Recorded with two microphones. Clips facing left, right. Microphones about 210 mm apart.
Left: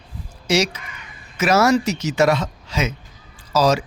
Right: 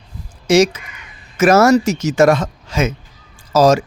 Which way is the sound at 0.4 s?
50° right (ahead or behind).